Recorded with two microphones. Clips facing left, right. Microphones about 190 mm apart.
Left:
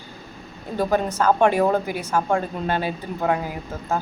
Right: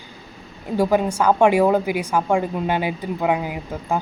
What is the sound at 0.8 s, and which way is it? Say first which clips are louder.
A woman's voice: right 3 dB; 10° right (ahead or behind).